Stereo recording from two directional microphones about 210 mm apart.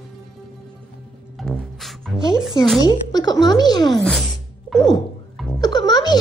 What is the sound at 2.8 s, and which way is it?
A woman's voice, 20° left (ahead or behind).